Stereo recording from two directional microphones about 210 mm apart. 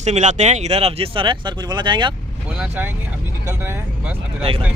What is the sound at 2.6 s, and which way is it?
Speech, 10° right (ahead or behind).